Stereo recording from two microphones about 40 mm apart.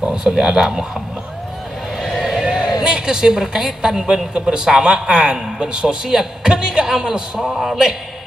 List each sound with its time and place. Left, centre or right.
0.0 s a man's voice: centre
2.4 s a woman's voice: centre
7.4 s a man's voice: centre